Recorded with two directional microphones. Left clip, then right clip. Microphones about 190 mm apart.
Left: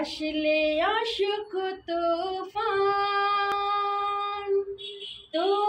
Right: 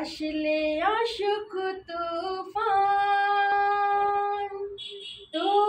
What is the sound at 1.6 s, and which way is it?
Female singing, 15° right (ahead or behind).